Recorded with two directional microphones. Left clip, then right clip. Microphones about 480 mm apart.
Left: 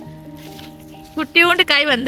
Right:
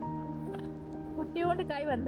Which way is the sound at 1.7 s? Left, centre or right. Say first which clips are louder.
Left 18 dB; centre.